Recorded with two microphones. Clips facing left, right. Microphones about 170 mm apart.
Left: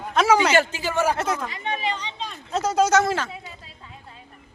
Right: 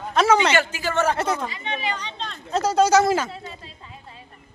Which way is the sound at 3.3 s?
5° left (ahead or behind).